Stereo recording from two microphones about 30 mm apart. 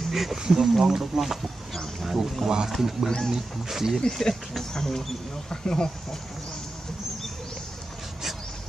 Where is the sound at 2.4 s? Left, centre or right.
Centre.